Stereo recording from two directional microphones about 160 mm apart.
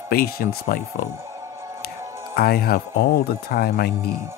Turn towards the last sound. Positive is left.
turn(degrees=70)  # may be behind; listen again after turning